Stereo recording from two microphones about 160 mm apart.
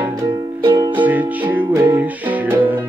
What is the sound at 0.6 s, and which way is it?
Music, 20° right (ahead or behind).